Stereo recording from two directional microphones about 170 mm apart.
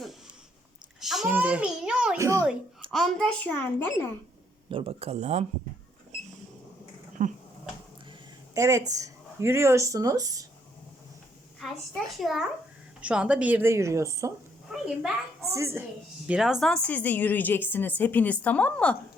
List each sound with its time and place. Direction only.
1.0 s a sound: 5° right (ahead or behind)
2.1 s a sound: 20° right (ahead or behind)
2.9 s a woman's voice: centre (ahead or behind)
4.7 s speech: 35° right (ahead or behind)
7.2 s speech: 50° right (ahead or behind)
8.5 s a woman's voice: 15° right (ahead or behind)
11.6 s a child's voice: centre (ahead or behind); by 14.3 s 15° right (ahead or behind)
14.7 s a woman's voice: 5° right (ahead or behind)
15.4 s a woman's voice: 15° right (ahead or behind); by 18.9 s 5° left (ahead or behind)